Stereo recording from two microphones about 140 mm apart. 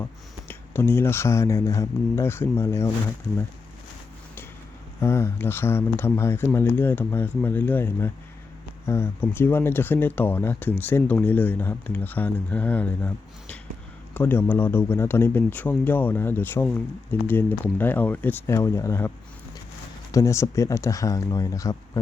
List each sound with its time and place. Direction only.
0.0 s speech: 15° left (ahead or behind)
4.9 s speech: 20° left (ahead or behind)